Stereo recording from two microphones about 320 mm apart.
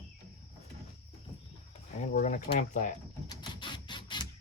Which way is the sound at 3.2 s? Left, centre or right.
Centre.